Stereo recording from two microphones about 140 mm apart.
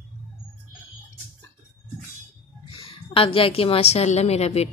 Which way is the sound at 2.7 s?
40° left (ahead or behind).